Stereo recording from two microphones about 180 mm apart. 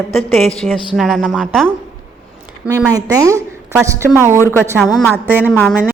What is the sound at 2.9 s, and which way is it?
A woman's voice, 20° right (ahead or behind).